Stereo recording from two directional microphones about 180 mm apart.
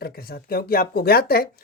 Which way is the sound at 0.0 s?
55° left (ahead or behind).